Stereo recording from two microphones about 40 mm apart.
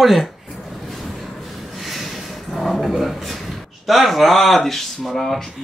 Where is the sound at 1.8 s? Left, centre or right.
Centre.